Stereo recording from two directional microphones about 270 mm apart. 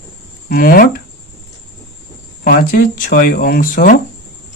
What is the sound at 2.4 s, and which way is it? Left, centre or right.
Speech, left.